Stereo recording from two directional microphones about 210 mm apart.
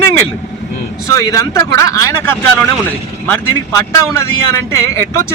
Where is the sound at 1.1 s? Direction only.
15° left (ahead or behind).